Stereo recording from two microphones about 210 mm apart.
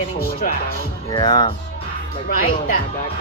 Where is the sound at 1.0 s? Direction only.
20° left (ahead or behind).